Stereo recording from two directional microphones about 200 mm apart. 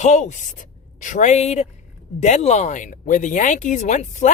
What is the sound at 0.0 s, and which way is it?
Speech, 35° left (ahead or behind).